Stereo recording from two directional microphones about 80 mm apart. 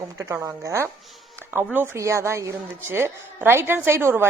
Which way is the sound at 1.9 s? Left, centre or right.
Right.